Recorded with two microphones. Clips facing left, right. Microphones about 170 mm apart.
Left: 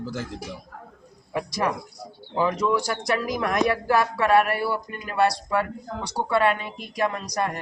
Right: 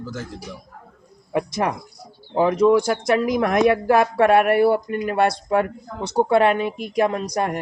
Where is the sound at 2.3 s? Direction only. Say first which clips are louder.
Right 7 dB; 55° right (ahead or behind).